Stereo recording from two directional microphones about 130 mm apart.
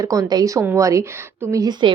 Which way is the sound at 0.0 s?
25° right (ahead or behind).